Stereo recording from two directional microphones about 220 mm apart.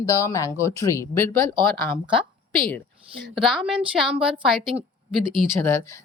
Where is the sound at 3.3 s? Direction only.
Centre (ahead or behind).